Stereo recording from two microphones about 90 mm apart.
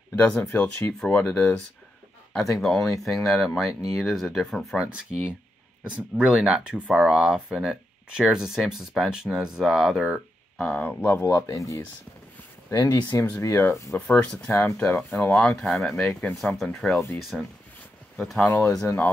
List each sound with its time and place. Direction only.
0.1 s speech: 15° left (ahead or behind)
2.5 s speech: 5° left (ahead or behind)
5.1 s speech: 10° right (ahead or behind)
10.6 s speech: 15° left (ahead or behind)
11.4 s speech: 35° left (ahead or behind)
13.1 s speech: 20° left (ahead or behind)
13.4 s speech: 30° left (ahead or behind)
13.9 s speech: 10° left (ahead or behind)
16.1 s speech: 15° left (ahead or behind)